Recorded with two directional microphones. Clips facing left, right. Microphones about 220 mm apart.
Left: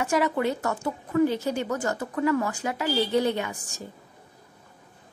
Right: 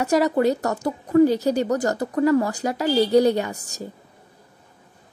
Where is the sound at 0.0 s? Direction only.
40° right (ahead or behind).